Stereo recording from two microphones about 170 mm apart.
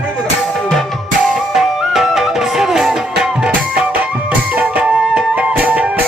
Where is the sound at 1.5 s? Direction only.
Centre (ahead or behind).